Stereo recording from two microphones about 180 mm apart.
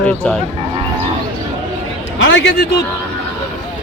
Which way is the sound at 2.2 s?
90° left.